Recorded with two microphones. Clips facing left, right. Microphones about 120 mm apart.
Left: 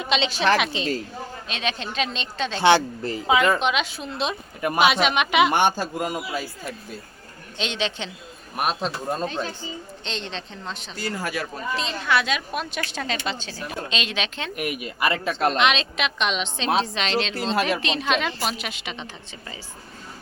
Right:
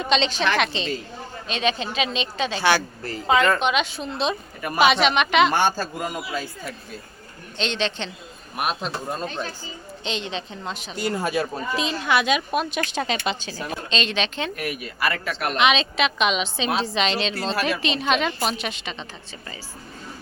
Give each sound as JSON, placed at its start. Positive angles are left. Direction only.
{"t": 0.0, "sound": "a woman's voice", "side_deg": 5}
{"t": 2.6, "sound": "speech", "side_deg": 20}
{"t": 3.2, "sound": "a woman's voice", "side_deg": 5}
{"t": 10.9, "sound": "a woman's voice", "side_deg": -20}
{"t": 13.9, "sound": "a woman's voice", "side_deg": 5}
{"t": 14.5, "sound": "speech", "side_deg": 20}
{"t": 15.5, "sound": "a woman's voice", "side_deg": 0}
{"t": 17.5, "sound": "speech", "side_deg": 25}
{"t": 17.7, "sound": "a woman's voice", "side_deg": 0}